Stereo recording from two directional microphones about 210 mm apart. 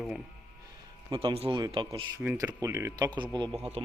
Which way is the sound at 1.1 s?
20° right (ahead or behind).